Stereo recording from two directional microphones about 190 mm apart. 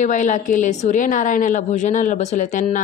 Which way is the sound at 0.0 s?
40° left (ahead or behind).